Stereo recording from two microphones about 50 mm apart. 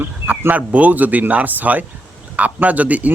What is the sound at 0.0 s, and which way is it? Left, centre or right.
Speech, right.